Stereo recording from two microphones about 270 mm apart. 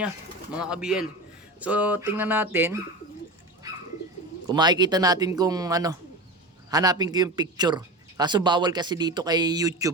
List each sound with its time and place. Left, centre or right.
0.6 s speech: centre
4.4 s speech: centre